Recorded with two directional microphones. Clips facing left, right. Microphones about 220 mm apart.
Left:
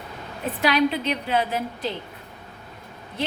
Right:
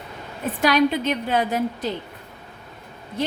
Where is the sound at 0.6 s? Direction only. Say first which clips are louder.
Right 2 dB; 45° right (ahead or behind).